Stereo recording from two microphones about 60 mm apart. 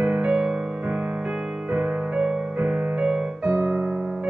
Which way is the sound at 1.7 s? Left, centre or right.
Centre.